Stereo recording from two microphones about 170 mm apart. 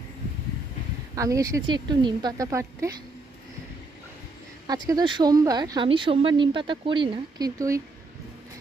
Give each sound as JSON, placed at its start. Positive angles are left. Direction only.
{"t": 1.1, "sound": "speech", "side_deg": -20}
{"t": 4.6, "sound": "speech", "side_deg": -25}